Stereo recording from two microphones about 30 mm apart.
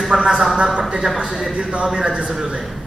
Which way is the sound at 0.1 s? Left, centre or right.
Centre.